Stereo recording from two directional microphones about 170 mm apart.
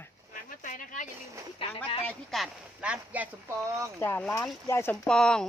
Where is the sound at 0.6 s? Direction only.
50° left (ahead or behind).